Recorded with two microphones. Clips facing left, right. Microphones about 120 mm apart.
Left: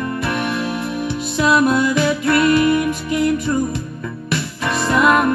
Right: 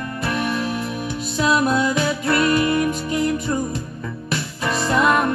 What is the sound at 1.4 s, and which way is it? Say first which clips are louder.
Music: left 3 dB; 40° right (ahead or behind).